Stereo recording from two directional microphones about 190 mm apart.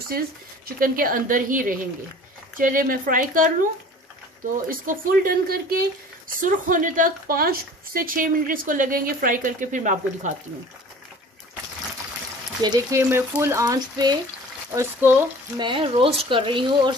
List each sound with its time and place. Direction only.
0.7 s speech: 50° right (ahead or behind)
4.6 s speech: 50° right (ahead or behind)
12.6 s speech: 15° right (ahead or behind)
15.5 s speech: 25° right (ahead or behind)